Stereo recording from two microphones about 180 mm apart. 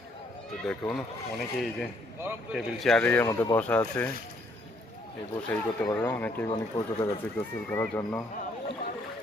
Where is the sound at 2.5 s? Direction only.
Centre (ahead or behind).